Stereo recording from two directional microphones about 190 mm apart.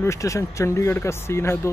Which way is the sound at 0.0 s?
15° left (ahead or behind).